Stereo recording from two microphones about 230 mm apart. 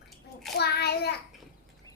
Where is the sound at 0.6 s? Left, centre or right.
Left.